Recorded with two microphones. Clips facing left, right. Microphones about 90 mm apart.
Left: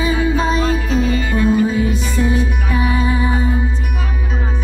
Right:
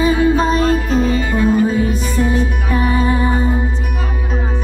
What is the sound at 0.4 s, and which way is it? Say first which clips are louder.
Music: right 2 dB; 40° right (ahead or behind).